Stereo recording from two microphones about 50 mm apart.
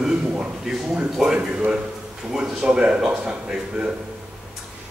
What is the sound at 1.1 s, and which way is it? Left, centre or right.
Speech, centre.